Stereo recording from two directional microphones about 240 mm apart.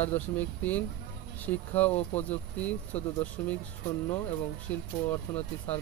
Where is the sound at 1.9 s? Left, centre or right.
Left.